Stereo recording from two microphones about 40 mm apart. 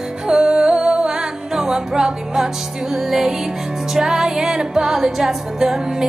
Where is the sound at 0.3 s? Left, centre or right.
Centre.